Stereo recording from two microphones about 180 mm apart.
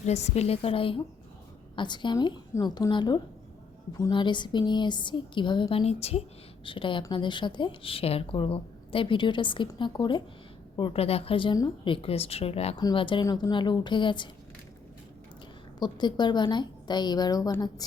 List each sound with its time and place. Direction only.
0.0 s a woman's voice: 40° left (ahead or behind)
15.8 s a woman's voice: 25° left (ahead or behind)